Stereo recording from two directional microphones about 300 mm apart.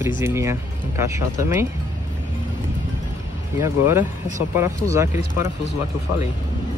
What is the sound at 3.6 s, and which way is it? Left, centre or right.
Speech, centre.